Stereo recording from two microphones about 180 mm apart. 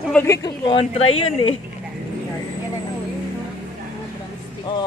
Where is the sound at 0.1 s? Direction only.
15° left (ahead or behind); by 1.5 s 35° left (ahead or behind).